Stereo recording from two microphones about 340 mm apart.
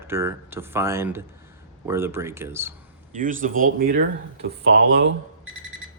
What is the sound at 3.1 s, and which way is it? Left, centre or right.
Speech, right.